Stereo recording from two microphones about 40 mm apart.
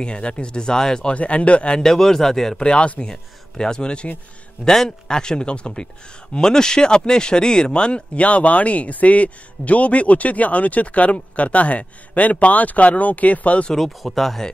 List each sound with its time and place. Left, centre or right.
0.0 s a man's voice: left
1.0 s speech: left
1.8 s speech: centre
2.5 s a man's voice: left
4.6 s a man's voice: centre; by 13.7 s left
13.7 s speech: centre